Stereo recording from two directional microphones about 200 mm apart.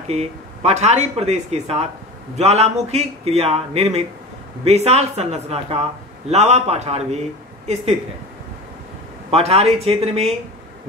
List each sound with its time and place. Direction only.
0.1 s a woman's voice: 35° right (ahead or behind)
9.3 s speech: 30° right (ahead or behind)